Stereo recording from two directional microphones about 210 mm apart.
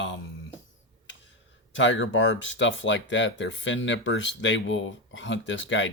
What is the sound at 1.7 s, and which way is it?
Speech, 60° left (ahead or behind).